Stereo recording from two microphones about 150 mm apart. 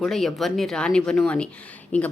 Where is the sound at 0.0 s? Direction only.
Centre (ahead or behind).